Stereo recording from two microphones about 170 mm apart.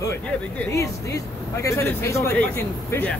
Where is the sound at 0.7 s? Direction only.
20° left (ahead or behind).